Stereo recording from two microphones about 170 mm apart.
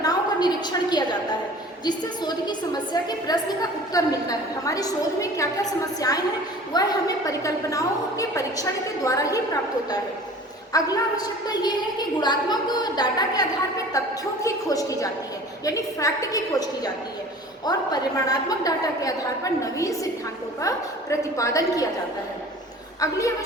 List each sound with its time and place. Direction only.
0.0 s a sound: 25° left (ahead or behind)
1.8 s a woman's voice: 25° left (ahead or behind)
10.7 s a woman's voice: 20° left (ahead or behind)
23.0 s a woman's voice: 20° left (ahead or behind)